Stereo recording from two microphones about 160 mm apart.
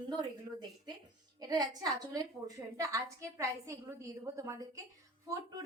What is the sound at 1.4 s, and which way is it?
A woman's voice, 25° right (ahead or behind).